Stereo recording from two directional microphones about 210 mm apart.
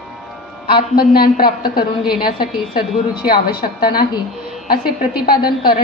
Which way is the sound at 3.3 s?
45° left (ahead or behind).